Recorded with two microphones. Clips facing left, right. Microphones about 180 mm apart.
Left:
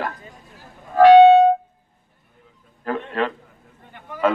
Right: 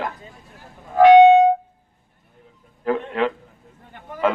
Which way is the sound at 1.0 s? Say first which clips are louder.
Left 1 dB; 15° right (ahead or behind).